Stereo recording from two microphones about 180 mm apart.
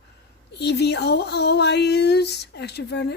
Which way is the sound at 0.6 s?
65° left (ahead or behind).